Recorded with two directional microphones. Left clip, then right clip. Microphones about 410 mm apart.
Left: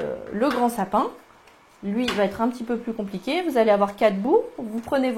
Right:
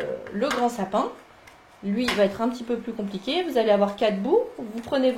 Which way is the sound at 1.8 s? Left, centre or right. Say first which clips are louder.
Right 1 dB; centre.